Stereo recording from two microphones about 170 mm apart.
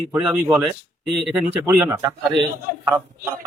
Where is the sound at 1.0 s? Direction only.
Centre (ahead or behind).